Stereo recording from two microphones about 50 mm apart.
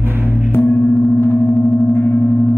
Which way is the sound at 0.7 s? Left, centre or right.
Left.